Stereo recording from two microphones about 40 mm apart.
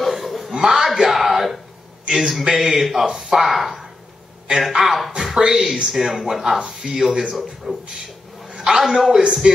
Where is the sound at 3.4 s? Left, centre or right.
Centre.